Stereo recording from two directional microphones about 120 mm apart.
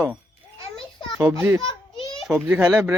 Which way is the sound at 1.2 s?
20° right (ahead or behind).